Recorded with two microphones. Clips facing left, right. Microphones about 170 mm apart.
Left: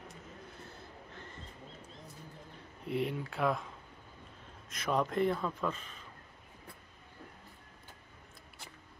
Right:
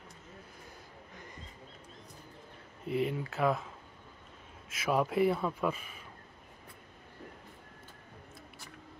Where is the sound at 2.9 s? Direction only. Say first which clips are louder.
Right 2 dB; centre (ahead or behind).